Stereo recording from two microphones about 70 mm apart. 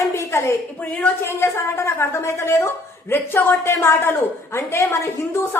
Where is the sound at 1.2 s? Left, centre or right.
Left.